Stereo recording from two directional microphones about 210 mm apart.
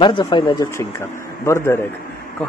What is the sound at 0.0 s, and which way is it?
Speech, 25° left (ahead or behind).